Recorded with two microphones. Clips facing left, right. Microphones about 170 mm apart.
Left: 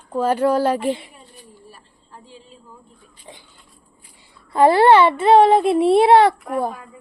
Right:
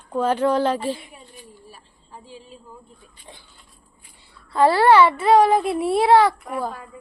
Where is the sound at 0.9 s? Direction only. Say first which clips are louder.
Left 4 dB; 30° left (ahead or behind).